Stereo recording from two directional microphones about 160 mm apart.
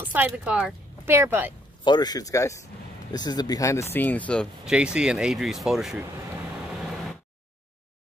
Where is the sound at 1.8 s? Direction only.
25° left (ahead or behind); by 4.4 s 10° left (ahead or behind).